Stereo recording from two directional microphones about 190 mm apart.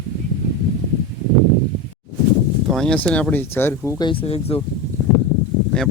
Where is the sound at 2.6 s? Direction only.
Centre (ahead or behind).